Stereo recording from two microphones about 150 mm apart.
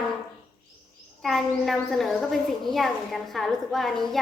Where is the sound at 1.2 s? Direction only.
Centre (ahead or behind).